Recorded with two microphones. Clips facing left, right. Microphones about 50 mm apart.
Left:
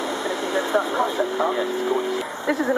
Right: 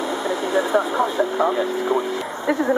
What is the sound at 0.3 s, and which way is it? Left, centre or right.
Speech, centre.